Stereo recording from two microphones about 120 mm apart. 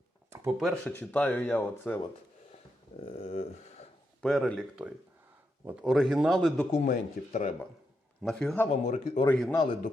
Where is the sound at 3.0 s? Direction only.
55° left (ahead or behind).